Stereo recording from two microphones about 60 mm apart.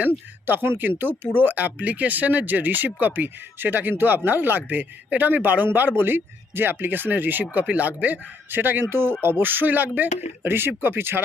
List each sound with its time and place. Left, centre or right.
0.4 s speech: right